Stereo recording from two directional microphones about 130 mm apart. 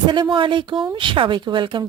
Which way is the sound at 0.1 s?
40° right (ahead or behind).